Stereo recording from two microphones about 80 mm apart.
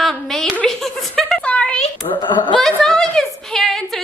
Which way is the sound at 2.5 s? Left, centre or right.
Centre.